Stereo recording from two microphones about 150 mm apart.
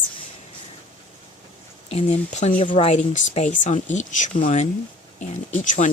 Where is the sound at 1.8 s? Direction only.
45° left (ahead or behind).